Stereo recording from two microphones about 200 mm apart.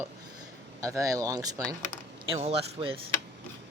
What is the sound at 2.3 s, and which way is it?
Speech, 30° right (ahead or behind).